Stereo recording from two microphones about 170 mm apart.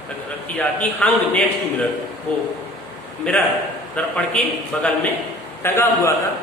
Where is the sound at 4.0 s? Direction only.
5° left (ahead or behind).